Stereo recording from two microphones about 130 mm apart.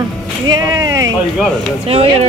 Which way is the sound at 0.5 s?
25° right (ahead or behind).